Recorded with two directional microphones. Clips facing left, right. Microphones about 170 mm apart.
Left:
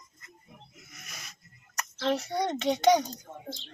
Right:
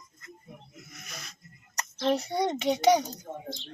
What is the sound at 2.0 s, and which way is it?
A child's voice, 15° right (ahead or behind).